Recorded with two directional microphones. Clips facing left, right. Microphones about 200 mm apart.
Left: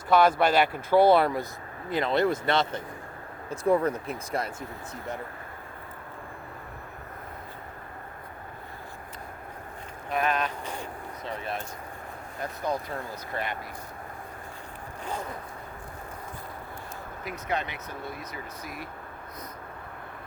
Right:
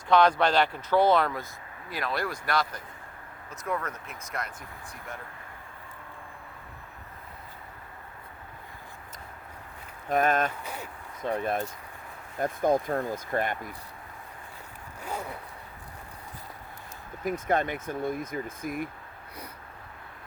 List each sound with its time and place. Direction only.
0.1 s speech: 5° left (ahead or behind); by 4.5 s 30° left (ahead or behind)
10.1 s speech: 45° right (ahead or behind)
15.0 s speech: 10° right (ahead or behind)
17.2 s speech: 50° right (ahead or behind)